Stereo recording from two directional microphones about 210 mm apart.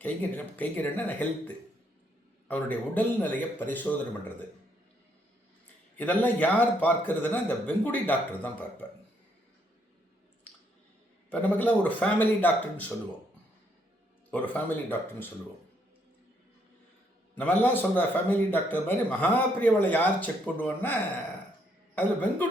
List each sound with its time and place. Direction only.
0.0 s a man's voice: 10° left (ahead or behind)
6.0 s a man's voice: 10° left (ahead or behind)
11.3 s a man's voice: 10° left (ahead or behind)
14.3 s a man's voice: 5° left (ahead or behind)
17.3 s a man's voice: 10° left (ahead or behind)
21.9 s a man's voice: 10° left (ahead or behind)